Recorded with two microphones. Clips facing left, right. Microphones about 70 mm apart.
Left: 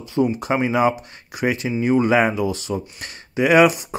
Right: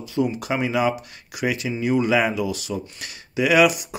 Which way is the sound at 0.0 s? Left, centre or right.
Left.